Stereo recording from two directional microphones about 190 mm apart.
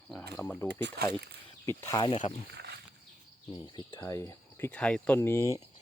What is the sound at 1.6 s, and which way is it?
Speech, 15° left (ahead or behind).